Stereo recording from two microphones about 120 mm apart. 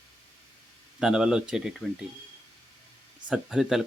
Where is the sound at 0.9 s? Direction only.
5° right (ahead or behind).